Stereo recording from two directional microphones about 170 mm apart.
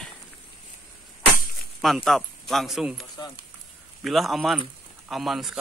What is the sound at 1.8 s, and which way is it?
Speech, centre (ahead or behind).